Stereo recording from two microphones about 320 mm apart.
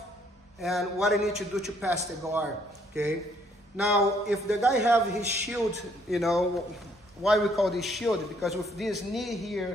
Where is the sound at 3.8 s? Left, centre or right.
Centre.